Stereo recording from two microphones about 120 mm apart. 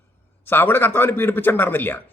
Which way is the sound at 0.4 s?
20° left (ahead or behind).